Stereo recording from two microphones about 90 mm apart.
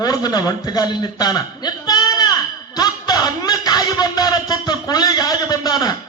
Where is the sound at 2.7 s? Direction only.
45° left (ahead or behind).